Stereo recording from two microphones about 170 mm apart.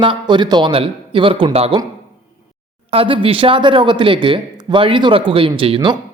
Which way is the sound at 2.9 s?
30° right (ahead or behind).